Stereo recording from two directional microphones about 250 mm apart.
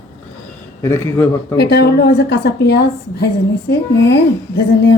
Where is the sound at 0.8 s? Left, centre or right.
Centre.